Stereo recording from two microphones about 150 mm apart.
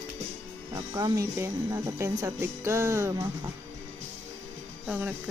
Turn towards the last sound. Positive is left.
turn(degrees=-15)  # may be behind; listen again after turning